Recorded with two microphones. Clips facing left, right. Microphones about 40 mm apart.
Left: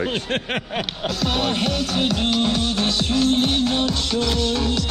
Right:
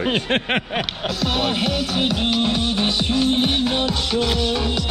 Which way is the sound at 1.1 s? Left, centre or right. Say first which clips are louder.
Even; centre.